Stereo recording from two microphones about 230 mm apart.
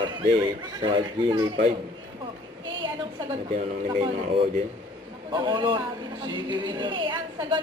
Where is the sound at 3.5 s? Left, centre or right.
Right.